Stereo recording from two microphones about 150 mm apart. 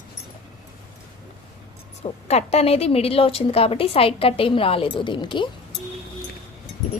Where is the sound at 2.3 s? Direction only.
45° left (ahead or behind).